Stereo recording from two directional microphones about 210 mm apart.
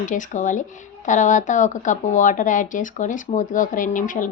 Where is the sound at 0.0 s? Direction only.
35° left (ahead or behind).